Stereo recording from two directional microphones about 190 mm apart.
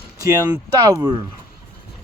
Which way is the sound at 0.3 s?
15° right (ahead or behind).